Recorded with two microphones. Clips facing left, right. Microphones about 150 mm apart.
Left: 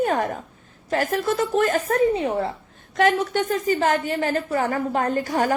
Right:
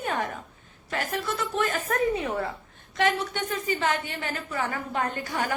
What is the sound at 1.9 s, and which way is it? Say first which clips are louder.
Speech: left 6 dB; 30° left (ahead or behind).